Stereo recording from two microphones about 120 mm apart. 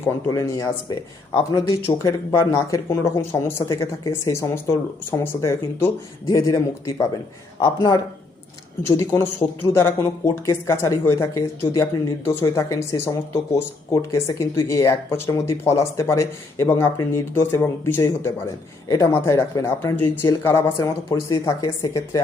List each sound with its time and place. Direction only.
0.0 s speech: 25° left (ahead or behind)